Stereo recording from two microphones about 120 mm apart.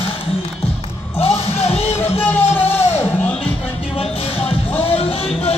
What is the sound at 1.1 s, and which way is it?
Music, 55° left (ahead or behind).